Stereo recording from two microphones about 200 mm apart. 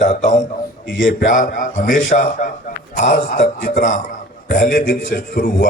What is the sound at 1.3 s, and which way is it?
A man's voice, 40° left (ahead or behind).